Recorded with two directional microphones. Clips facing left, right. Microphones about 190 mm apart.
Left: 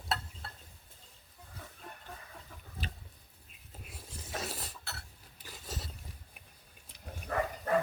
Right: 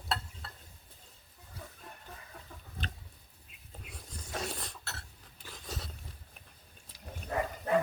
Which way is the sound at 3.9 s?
5° left (ahead or behind).